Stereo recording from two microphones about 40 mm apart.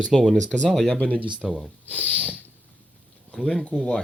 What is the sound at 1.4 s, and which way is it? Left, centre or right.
Speech, centre.